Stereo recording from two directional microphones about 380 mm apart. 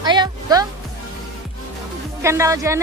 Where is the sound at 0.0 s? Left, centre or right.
Centre.